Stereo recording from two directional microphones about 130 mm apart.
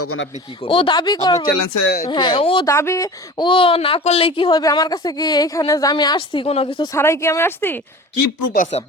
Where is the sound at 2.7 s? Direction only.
25° left (ahead or behind).